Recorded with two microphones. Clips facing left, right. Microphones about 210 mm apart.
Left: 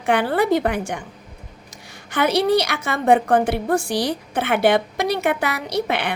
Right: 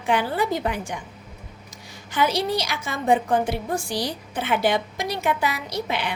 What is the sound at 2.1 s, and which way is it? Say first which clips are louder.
A woman's voice: left 5 dB; 65° left (ahead or behind).